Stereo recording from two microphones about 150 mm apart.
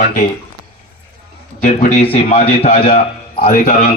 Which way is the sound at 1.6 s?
55° left (ahead or behind).